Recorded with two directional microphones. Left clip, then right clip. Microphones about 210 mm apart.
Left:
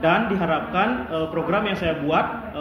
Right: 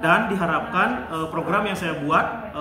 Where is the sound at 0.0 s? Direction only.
20° right (ahead or behind).